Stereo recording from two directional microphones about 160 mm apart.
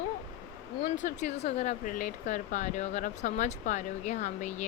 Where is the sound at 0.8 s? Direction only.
55° left (ahead or behind).